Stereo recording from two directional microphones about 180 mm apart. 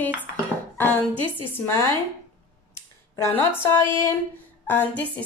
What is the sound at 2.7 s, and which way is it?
A woman's voice, 15° left (ahead or behind).